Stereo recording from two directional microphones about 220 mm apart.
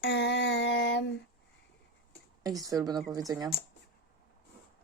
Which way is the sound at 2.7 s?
15° right (ahead or behind).